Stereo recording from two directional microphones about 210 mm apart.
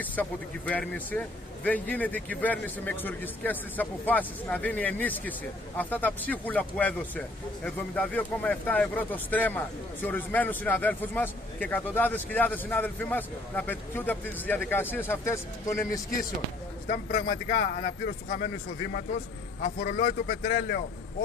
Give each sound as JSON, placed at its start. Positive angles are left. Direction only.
{"t": 0.0, "sound": "speech", "side_deg": 10}
{"t": 16.9, "sound": "a man's voice", "side_deg": 45}